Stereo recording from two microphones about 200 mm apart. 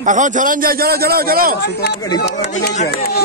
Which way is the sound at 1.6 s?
55° left (ahead or behind).